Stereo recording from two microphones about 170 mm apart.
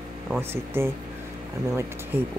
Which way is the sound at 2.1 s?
10° right (ahead or behind).